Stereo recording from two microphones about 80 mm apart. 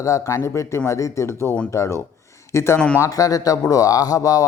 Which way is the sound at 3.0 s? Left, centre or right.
Left.